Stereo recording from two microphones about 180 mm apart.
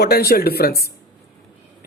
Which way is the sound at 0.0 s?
60° left (ahead or behind).